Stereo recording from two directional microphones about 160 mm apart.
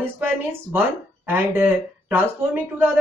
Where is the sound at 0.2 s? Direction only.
10° right (ahead or behind).